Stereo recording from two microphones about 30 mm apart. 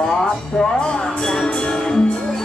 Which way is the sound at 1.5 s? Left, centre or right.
Left.